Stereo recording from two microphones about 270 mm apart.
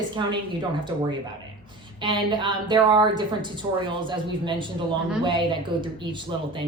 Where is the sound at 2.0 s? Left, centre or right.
Centre.